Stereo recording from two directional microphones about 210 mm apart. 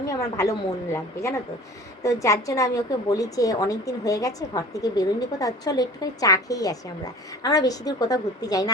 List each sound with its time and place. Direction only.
0.0 s a woman's voice: 15° left (ahead or behind)